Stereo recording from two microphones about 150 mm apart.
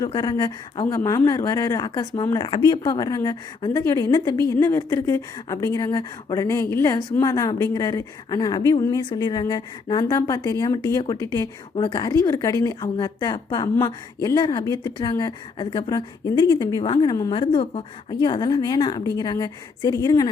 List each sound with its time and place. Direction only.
0.1 s a woman's voice: 25° left (ahead or behind)
12.3 s a woman's voice: 20° left (ahead or behind)